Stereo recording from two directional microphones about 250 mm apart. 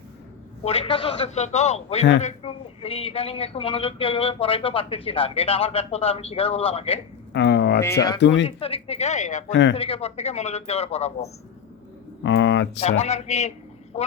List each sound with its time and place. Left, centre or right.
0.6 s speech: left
7.3 s speech: left
8.4 s speech: left
9.5 s speech: left
9.7 s speech: left
12.2 s a sound: left
12.8 s speech: left